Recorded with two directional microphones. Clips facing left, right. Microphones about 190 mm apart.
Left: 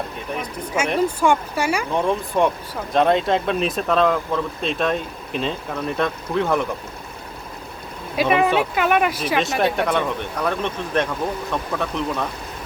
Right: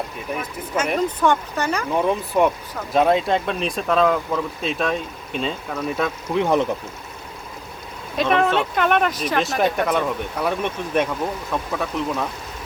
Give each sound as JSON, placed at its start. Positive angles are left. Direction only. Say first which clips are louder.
{"t": 0.9, "sound": "speech", "louder": "left 2 dB", "side_deg": 10}
{"t": 1.9, "sound": "speech", "louder": "right 1 dB", "side_deg": -5}
{"t": 6.3, "sound": "speech", "louder": "right 2 dB", "side_deg": -15}
{"t": 8.1, "sound": "speech", "louder": "left 1 dB", "side_deg": 5}